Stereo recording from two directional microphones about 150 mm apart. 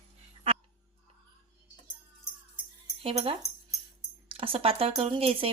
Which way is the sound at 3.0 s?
40° right (ahead or behind).